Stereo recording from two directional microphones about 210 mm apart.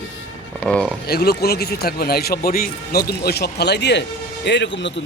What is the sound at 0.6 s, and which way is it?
Speech, 5° left (ahead or behind).